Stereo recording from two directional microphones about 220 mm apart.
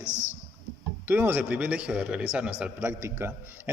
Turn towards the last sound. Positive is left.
turn(degrees=-10)  # may be behind; listen again after turning